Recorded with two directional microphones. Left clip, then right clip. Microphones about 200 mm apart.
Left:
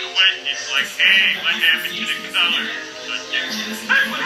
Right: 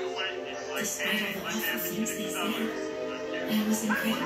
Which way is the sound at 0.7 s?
40° left (ahead or behind).